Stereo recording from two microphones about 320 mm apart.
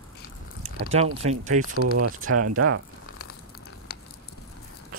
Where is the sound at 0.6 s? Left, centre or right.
Centre.